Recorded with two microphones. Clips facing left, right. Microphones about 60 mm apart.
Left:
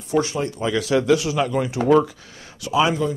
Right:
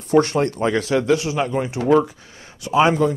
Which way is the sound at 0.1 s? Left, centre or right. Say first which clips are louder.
Right 5 dB; right.